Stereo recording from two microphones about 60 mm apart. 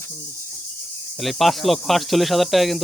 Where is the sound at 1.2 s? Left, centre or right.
Centre.